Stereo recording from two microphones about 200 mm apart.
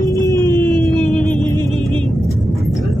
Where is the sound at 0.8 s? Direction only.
5° left (ahead or behind).